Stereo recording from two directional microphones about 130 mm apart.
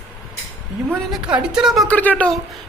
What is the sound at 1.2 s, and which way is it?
Speech, 5° right (ahead or behind).